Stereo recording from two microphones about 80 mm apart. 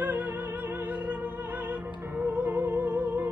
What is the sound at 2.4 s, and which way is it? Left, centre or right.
Music, right.